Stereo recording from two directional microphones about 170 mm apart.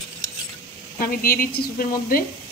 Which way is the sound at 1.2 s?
60° left (ahead or behind).